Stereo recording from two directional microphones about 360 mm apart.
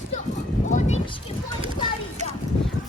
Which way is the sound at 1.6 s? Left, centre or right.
Centre.